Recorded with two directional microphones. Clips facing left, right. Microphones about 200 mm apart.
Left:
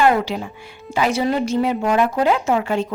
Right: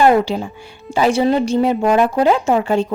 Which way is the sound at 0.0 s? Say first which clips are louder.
Right 4 dB; 35° right (ahead or behind).